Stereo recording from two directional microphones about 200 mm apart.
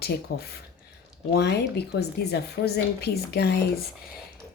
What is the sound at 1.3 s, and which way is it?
A woman's voice, 55° left (ahead or behind).